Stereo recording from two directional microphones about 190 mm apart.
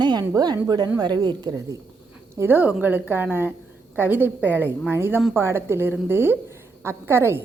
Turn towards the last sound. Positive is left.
turn(degrees=-10)  # may be behind; listen again after turning